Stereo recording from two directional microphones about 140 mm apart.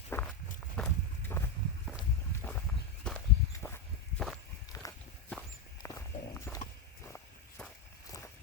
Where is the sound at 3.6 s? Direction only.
15° left (ahead or behind).